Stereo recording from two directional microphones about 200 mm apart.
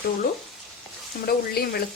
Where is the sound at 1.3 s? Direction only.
50° left (ahead or behind).